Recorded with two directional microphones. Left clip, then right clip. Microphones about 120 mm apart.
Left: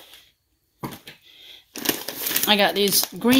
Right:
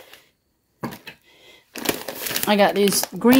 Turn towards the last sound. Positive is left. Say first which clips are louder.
# right 2 dB
turn(degrees=-40)  # may be behind; listen again after turning